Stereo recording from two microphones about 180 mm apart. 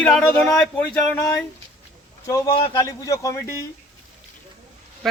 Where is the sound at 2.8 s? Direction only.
20° left (ahead or behind).